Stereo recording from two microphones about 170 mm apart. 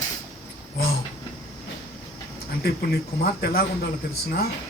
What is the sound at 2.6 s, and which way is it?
A man's voice, 65° left (ahead or behind).